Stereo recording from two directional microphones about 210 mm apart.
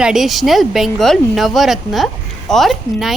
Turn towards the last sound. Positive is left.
turn(degrees=0)  # may be behind; listen again after turning